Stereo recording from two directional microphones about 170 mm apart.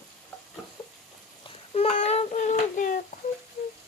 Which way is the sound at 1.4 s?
35° left (ahead or behind).